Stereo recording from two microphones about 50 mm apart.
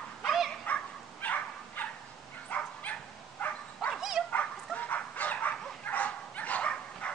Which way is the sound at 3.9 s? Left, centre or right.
Centre.